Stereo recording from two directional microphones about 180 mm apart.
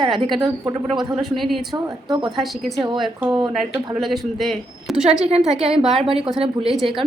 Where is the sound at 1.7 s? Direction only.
20° right (ahead or behind).